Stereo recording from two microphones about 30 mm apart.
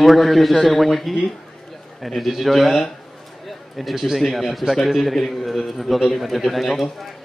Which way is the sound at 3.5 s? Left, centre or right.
Centre.